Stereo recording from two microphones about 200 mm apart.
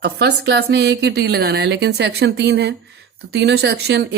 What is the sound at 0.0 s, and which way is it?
Speech, 55° right (ahead or behind).